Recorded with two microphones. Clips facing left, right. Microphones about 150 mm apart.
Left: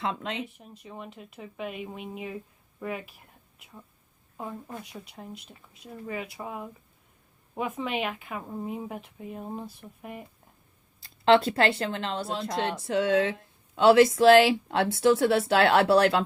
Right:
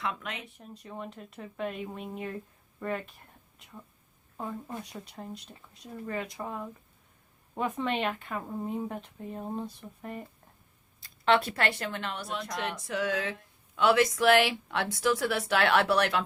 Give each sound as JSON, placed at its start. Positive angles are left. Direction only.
{"t": 0.0, "sound": "a woman's voice", "side_deg": 30}
{"t": 0.4, "sound": "speech", "side_deg": 0}
{"t": 11.3, "sound": "a woman's voice", "side_deg": 25}